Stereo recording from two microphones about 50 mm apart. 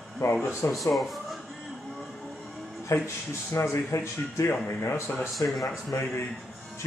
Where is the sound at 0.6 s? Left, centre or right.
Left.